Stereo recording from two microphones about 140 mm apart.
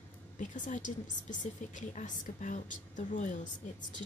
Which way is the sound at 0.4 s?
65° left (ahead or behind).